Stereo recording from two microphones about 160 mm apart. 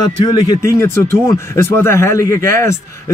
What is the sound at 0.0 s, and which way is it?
Speech, 25° left (ahead or behind).